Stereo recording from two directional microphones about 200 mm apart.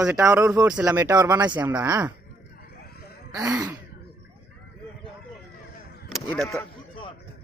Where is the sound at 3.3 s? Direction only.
15° right (ahead or behind).